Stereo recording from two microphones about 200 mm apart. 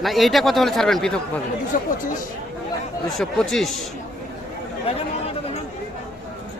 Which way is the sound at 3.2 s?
Centre (ahead or behind).